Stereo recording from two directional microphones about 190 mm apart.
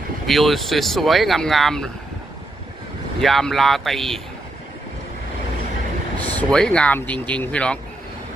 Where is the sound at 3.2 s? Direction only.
Centre (ahead or behind).